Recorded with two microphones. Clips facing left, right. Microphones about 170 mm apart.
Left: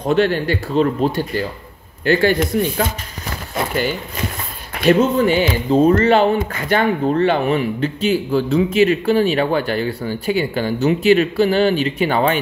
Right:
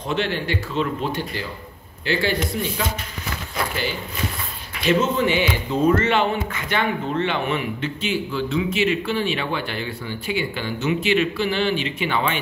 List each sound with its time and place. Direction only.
0.0 s speech: 40° left (ahead or behind)
4.7 s speech: 50° left (ahead or behind)